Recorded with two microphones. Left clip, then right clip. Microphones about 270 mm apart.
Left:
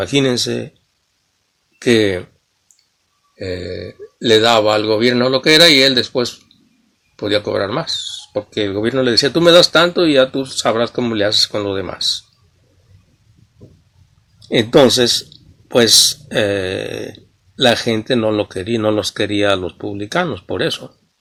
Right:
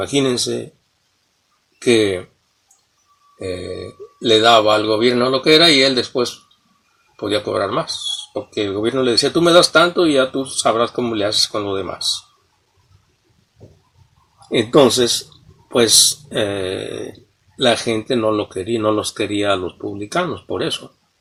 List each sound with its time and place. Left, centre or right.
0.1 s speech: left
1.8 s speech: left
3.3 s speech: left
14.5 s speech: left
16.3 s speech: left